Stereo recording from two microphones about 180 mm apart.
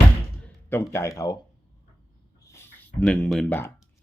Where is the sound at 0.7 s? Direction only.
15° left (ahead or behind).